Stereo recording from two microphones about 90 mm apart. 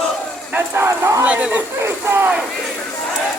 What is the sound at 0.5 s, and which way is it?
Speech, 25° right (ahead or behind).